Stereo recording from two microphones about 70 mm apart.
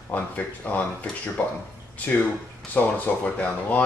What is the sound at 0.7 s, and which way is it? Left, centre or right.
Speech, left.